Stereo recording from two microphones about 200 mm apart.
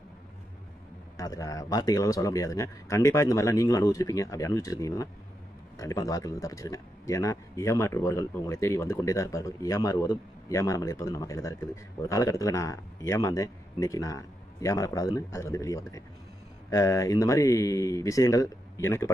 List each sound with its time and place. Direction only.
1.1 s a man's voice: 15° left (ahead or behind)